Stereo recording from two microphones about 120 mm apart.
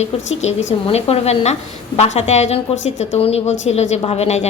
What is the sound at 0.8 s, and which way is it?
A woman's voice, 55° left (ahead or behind).